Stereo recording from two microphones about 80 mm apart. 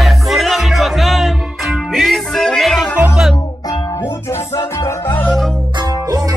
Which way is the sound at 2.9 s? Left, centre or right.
Centre.